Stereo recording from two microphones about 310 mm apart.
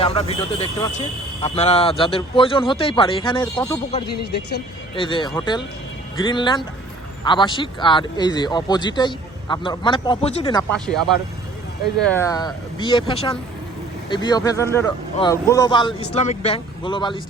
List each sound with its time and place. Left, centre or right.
0.0 s speech: centre
4.1 s speech: left
4.9 s speech: centre